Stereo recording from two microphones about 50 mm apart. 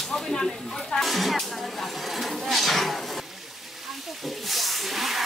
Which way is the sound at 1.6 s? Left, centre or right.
Centre.